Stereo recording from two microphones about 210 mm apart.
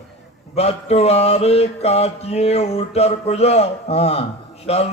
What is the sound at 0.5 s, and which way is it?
Mantra, 30° left (ahead or behind).